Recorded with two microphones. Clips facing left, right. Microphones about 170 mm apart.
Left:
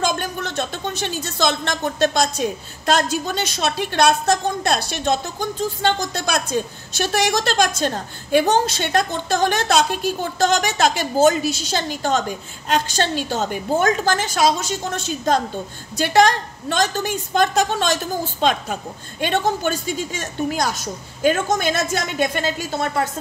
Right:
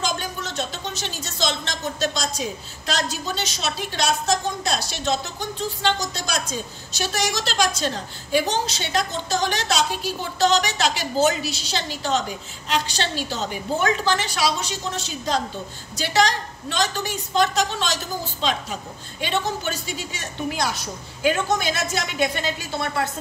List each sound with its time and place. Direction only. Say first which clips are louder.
0.0 s a woman's voice: left 5 dB; 55° left (ahead or behind)